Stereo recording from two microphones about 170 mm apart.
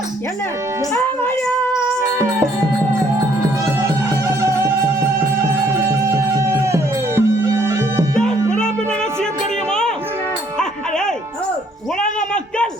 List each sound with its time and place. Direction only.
1.2 s baby cry: 10° left (ahead or behind)
5.7 s music: 15° right (ahead or behind)
8.3 s music: 45° left (ahead or behind)
10.6 s music: 5° left (ahead or behind)